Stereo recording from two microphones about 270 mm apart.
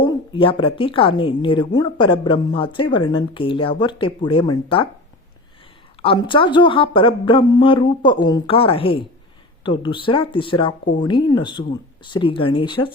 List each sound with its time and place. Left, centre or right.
0.0 s a woman's voice: centre
6.0 s a woman's voice: centre